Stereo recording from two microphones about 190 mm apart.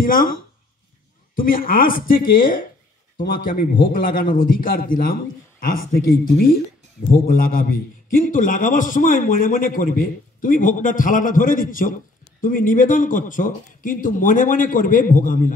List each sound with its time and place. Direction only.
0.0 s a man's voice: 45° left (ahead or behind)